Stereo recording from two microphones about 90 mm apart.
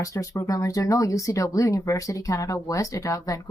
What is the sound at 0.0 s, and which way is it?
Speech, 35° left (ahead or behind).